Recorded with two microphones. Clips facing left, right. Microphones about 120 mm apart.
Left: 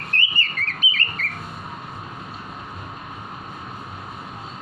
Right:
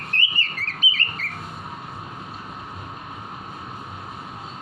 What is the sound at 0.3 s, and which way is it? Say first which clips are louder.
Whistle: left 2 dB; 30° right (ahead or behind).